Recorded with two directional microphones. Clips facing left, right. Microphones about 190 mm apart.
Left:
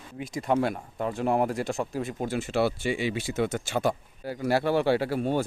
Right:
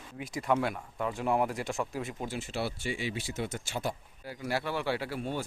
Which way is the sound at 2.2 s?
60° left (ahead or behind).